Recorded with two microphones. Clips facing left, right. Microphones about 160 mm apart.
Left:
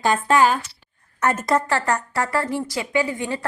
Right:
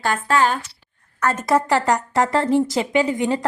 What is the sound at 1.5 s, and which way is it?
Speech, 10° right (ahead or behind).